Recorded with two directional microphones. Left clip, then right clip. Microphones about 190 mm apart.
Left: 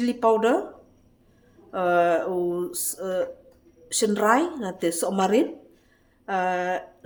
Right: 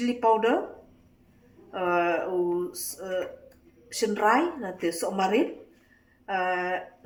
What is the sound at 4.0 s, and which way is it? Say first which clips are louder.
A woman's voice: left 2 dB; 55° left (ahead or behind).